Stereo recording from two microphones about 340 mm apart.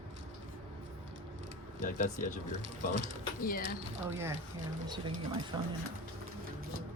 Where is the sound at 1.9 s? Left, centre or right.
Left.